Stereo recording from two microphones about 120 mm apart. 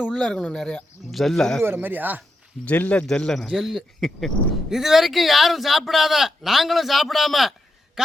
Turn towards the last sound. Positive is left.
turn(degrees=0)  # may be behind; listen again after turning